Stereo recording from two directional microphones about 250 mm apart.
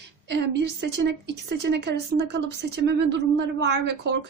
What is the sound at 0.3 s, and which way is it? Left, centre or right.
A woman's voice, right.